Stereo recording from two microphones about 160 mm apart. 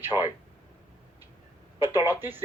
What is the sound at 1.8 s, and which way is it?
Speech, 10° right (ahead or behind).